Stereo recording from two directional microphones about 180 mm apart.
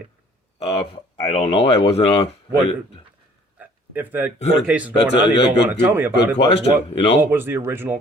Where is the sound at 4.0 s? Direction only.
10° right (ahead or behind).